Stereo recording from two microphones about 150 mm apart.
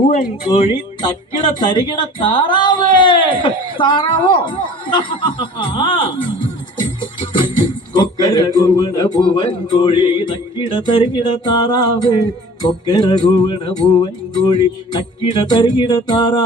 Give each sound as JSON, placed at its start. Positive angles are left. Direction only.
{"t": 0.1, "sound": "speech", "side_deg": 40}
{"t": 6.7, "sound": "music", "side_deg": 30}
{"t": 7.9, "sound": "a sound", "side_deg": 25}
{"t": 9.1, "sound": "speech", "side_deg": 30}
{"t": 14.9, "sound": "speech", "side_deg": 30}